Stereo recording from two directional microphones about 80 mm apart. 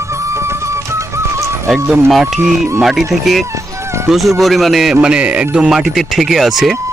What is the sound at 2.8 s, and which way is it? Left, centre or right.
Speech, centre.